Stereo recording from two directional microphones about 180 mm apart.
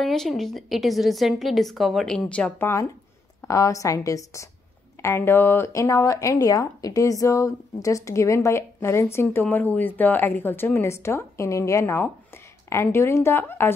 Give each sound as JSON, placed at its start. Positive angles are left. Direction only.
{"t": 0.0, "sound": "a woman's voice", "side_deg": 0}